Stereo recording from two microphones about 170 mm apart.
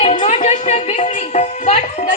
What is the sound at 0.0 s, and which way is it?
Music, 40° left (ahead or behind).